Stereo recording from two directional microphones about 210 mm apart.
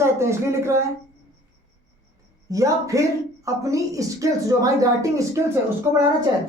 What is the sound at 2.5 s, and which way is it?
Speech, 15° right (ahead or behind).